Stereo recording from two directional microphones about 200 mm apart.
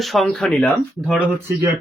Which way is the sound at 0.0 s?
Centre (ahead or behind).